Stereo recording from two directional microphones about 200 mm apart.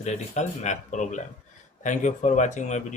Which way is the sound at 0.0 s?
35° left (ahead or behind).